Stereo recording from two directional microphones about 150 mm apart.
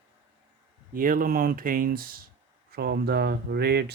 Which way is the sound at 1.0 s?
70° right (ahead or behind).